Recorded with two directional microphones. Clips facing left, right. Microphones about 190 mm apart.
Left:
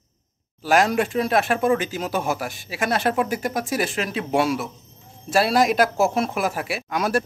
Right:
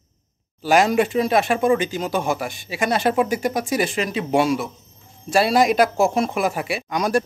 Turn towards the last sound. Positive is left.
turn(degrees=5)  # may be behind; listen again after turning